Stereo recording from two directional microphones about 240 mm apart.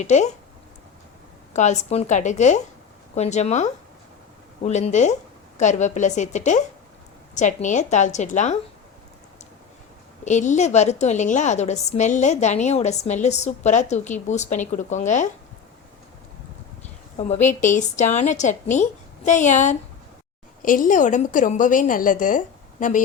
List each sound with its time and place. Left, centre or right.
0.0 s a woman's voice: left
1.5 s a woman's voice: left
10.2 s a woman's voice: left
17.2 s a woman's voice: left